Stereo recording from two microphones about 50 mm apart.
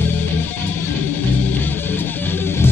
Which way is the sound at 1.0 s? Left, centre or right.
Left.